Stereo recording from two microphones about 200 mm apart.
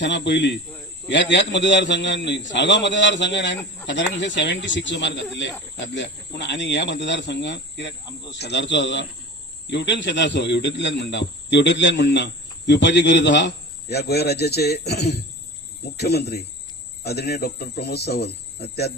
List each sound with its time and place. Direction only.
0.0 s speech: 60° left (ahead or behind)